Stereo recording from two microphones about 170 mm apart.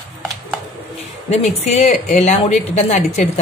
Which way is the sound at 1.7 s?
40° left (ahead or behind).